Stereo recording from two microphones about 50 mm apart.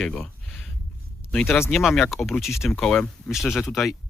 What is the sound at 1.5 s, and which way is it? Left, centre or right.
Speech, left.